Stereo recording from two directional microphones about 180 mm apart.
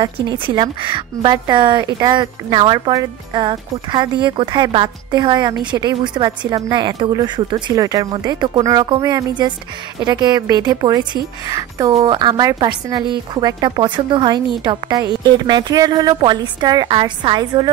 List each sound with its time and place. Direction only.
0.0 s a woman's voice: 25° right (ahead or behind)